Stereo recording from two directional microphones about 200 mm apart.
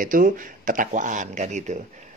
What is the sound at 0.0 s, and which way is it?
Speech, 45° right (ahead or behind).